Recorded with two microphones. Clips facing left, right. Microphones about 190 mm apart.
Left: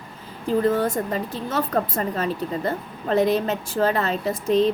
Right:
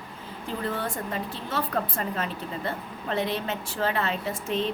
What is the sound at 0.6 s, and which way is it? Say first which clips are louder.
Speech: left 8 dB; 40° left (ahead or behind).